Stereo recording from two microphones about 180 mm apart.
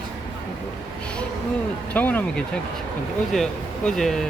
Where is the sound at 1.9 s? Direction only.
10° left (ahead or behind).